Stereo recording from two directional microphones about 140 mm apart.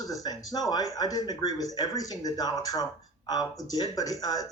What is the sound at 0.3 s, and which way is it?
Speech, 30° left (ahead or behind).